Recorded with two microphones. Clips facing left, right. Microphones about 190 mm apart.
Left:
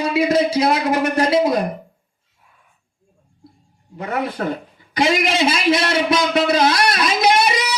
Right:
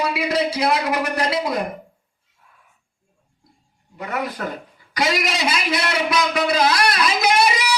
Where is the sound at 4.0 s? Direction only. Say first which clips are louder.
Left 3 dB; 30° left (ahead or behind).